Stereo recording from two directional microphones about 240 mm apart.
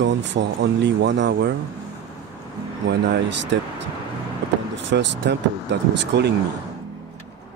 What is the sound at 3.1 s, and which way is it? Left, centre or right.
Speech, right.